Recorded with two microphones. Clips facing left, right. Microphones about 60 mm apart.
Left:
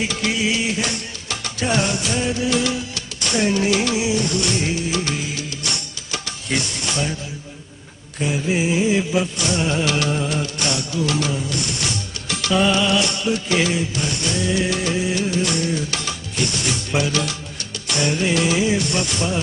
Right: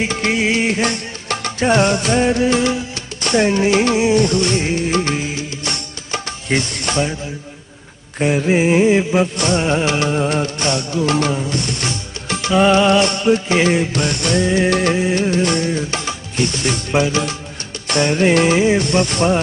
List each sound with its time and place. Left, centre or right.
0.0 s music: right
8.2 s music: right
13.7 s music: right
14.4 s music: right
17.8 s music: right